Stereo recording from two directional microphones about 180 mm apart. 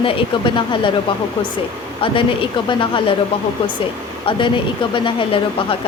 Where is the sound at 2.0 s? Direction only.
30° left (ahead or behind).